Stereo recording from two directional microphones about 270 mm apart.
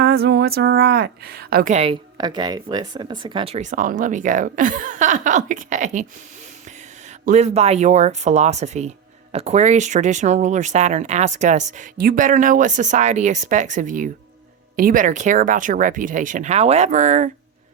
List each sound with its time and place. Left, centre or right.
0.0 s speech: right
7.3 s speech: right